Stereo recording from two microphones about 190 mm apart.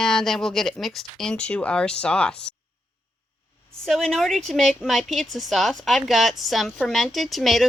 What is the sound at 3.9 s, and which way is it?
A woman's voice, centre (ahead or behind).